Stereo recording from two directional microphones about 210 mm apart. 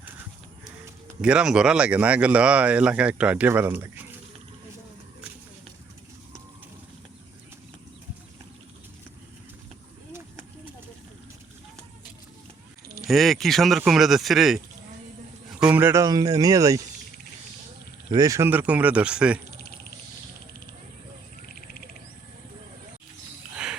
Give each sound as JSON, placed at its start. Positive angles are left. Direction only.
{"t": 1.2, "sound": "speech", "side_deg": -5}
{"t": 10.1, "sound": "a sound", "side_deg": -10}
{"t": 13.1, "sound": "speech", "side_deg": 0}
{"t": 15.6, "sound": "speech", "side_deg": -10}
{"t": 18.1, "sound": "speech", "side_deg": -15}
{"t": 19.5, "sound": "a sound", "side_deg": 50}